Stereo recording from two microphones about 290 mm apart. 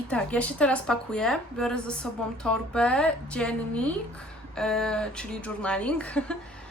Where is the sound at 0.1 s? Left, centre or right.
Centre.